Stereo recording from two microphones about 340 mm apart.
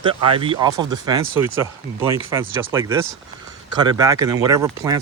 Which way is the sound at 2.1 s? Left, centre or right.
Centre.